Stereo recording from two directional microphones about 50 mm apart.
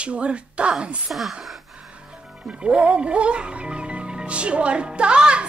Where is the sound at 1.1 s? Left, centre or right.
Centre.